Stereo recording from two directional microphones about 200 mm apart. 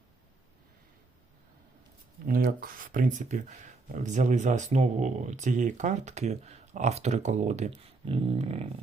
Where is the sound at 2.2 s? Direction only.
45° right (ahead or behind).